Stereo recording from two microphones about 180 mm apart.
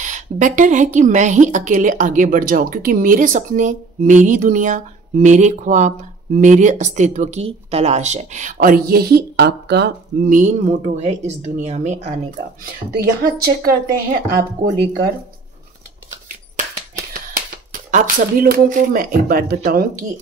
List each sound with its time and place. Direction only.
0.0 s a woman's voice: 45° right (ahead or behind); by 10.3 s 65° right (ahead or behind)
10.3 s speech: 40° right (ahead or behind)
12.9 s a woman's voice: 55° right (ahead or behind)
16.5 s a sound: 45° right (ahead or behind)
17.9 s a woman's voice: 55° right (ahead or behind)